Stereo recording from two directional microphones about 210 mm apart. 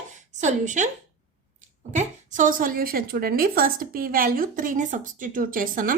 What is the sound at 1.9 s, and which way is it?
A woman's voice, 35° right (ahead or behind).